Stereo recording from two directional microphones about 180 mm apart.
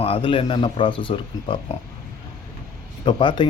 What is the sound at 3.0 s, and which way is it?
Speech, 25° left (ahead or behind).